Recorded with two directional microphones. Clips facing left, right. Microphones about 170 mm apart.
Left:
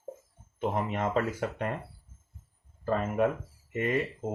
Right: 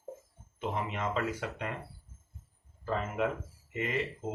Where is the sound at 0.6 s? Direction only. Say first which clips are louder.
Left 5 dB; 50° left (ahead or behind).